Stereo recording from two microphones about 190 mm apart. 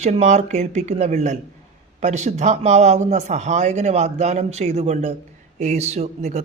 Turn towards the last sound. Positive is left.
turn(degrees=-35)  # may be behind; listen again after turning